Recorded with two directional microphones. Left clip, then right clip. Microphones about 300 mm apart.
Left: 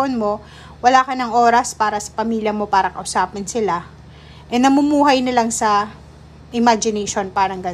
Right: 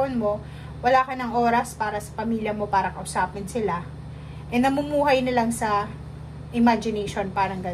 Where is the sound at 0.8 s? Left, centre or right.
Centre.